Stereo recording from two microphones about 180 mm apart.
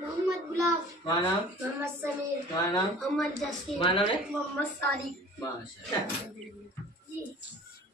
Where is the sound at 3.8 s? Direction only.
30° left (ahead or behind).